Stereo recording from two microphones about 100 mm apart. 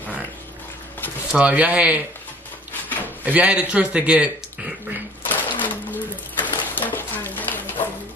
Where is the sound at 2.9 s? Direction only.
15° left (ahead or behind).